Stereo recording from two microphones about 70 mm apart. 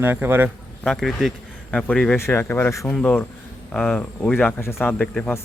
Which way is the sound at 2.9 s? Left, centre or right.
Centre.